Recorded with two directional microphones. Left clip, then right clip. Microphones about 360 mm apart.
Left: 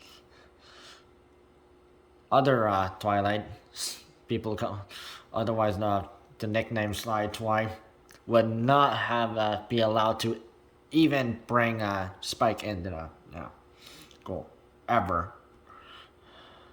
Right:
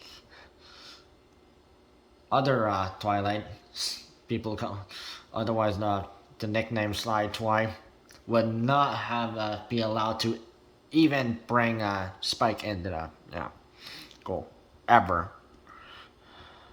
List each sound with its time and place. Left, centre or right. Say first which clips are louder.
0.0 s breathing: right 4 dB; centre
2.3 s a man's voice: left 2 dB; centre
15.8 s wheeze: right 1 dB; centre